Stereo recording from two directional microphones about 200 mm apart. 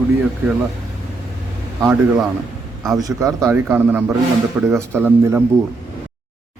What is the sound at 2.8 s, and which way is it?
A man's voice, 20° right (ahead or behind).